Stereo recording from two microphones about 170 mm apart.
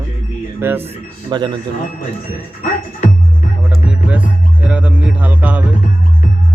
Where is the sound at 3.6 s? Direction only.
10° right (ahead or behind).